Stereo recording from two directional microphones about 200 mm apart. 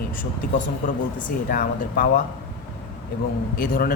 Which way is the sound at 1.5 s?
45° left (ahead or behind).